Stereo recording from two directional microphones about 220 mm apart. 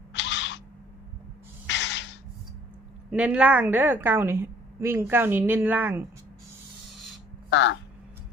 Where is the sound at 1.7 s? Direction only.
55° left (ahead or behind).